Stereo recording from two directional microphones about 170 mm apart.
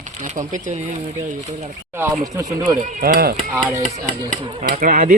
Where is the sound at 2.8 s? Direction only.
50° right (ahead or behind).